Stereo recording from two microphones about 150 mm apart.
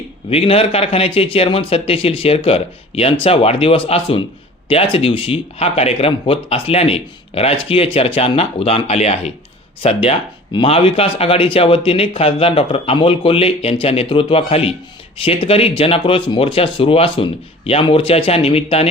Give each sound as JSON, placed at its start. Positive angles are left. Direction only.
{"t": 0.3, "sound": "speech", "side_deg": 40}